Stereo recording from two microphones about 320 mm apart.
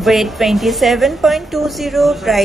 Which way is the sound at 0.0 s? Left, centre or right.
Centre.